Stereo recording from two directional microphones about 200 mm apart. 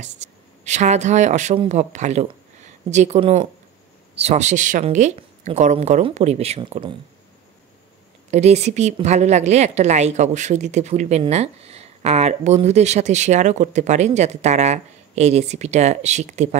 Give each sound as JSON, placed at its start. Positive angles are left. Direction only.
{"t": 0.7, "sound": "a woman's voice", "side_deg": -35}
{"t": 8.3, "sound": "a woman's voice", "side_deg": -35}